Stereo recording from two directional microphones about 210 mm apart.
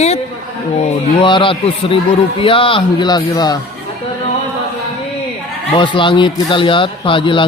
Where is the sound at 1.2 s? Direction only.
25° left (ahead or behind).